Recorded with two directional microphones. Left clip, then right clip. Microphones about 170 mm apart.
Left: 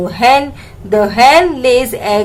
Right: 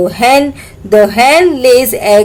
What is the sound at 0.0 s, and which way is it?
A woman's voice, 30° right (ahead or behind).